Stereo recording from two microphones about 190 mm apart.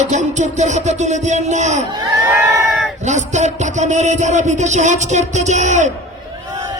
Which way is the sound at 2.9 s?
40° right (ahead or behind).